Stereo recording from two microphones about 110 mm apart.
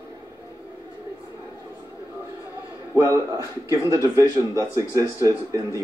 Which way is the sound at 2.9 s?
25° right (ahead or behind).